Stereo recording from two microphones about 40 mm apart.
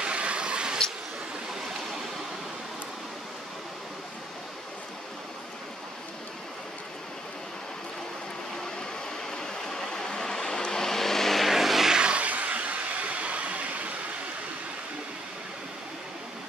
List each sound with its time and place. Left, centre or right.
0.0 s vehicle: right
9.3 s vehicle: centre
11.5 s vehicle: centre
11.9 s vehicle: right
12.3 s train: right